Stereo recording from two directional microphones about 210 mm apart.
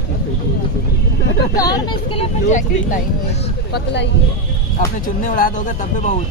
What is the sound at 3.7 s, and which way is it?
Speech, 55° left (ahead or behind).